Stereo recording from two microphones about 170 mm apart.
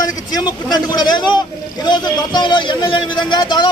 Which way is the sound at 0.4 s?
25° left (ahead or behind).